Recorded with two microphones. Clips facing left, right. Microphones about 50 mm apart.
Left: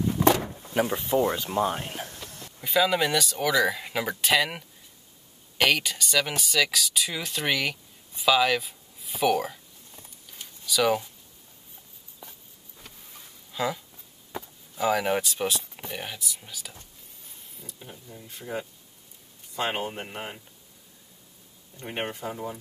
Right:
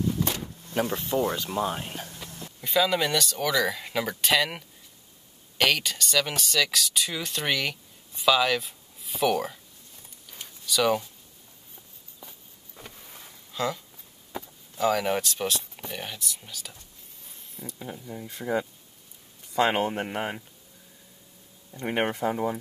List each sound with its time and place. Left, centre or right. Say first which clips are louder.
0.2 s vehicle: left 9 dB; left
0.7 s speech: left 2 dB; centre
2.1 s a sound: right 1 dB; centre
2.6 s speech: left 1 dB; centre
10.7 s speech: even; centre
13.5 s speech: even; centre
17.4 s a sound: right 7 dB; centre
17.7 s speech: right 7 dB; right
18.0 s speech: right 6 dB; right
19.5 s speech: right 6 dB; right
19.9 s speech: right 6 dB; right
21.7 s speech: right 6 dB; right